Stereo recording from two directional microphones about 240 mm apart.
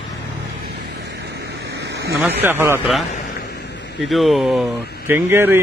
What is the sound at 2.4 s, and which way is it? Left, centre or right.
Speech, centre.